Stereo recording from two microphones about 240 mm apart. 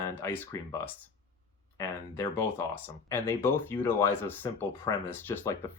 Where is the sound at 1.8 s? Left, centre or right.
Centre.